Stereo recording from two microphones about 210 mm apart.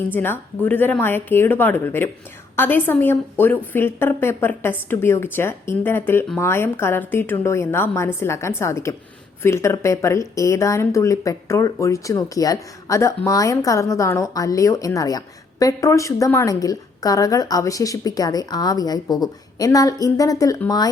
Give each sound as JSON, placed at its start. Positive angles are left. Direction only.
{"t": 0.1, "sound": "speech", "side_deg": 10}